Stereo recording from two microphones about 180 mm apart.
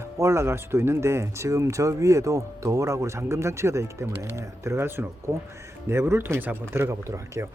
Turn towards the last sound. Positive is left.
turn(degrees=-15)  # may be behind; listen again after turning